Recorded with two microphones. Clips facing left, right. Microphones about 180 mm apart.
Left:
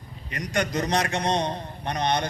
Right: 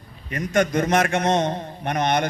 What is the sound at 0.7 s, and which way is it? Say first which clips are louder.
A man's voice: right 5 dB; 50° right (ahead or behind).